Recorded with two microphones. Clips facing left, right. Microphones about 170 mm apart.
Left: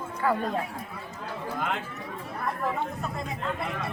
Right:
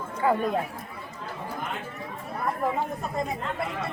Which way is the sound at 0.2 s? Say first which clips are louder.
Right 3 dB; 20° right (ahead or behind).